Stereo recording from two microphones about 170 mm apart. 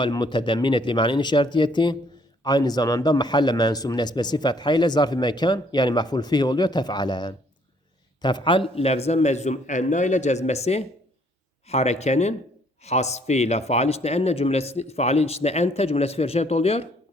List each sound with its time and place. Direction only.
0.0 s a man's voice: 25° left (ahead or behind)